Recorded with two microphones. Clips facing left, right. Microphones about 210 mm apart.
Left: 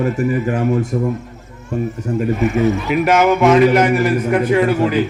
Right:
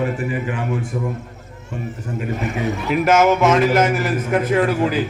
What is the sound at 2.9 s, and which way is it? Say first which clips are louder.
A man's voice: right 3 dB; centre (ahead or behind).